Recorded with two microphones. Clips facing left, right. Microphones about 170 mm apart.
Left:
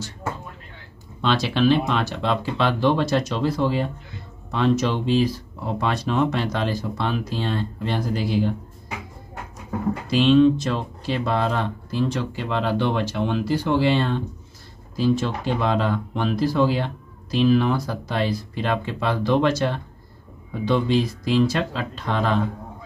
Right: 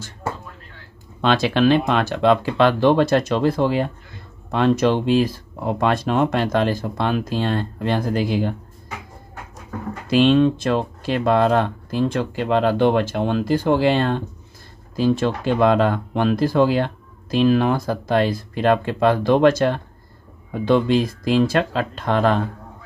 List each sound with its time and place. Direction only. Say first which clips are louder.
1.2 s speech: right 3 dB; 55° right (ahead or behind)
10.0 s speech: right 1 dB; 55° right (ahead or behind)